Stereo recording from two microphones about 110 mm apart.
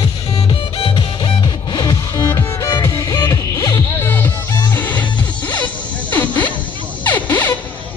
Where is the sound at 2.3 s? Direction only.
25° left (ahead or behind).